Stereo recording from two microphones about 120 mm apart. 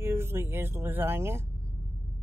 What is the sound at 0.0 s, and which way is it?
Speech, 20° right (ahead or behind).